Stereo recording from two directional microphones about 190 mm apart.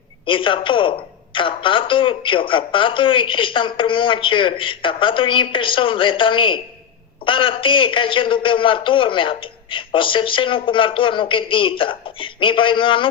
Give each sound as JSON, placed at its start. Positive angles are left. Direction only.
{"t": 0.3, "sound": "a woman's voice", "side_deg": 25}